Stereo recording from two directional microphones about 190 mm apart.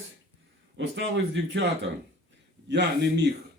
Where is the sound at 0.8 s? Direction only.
75° right (ahead or behind).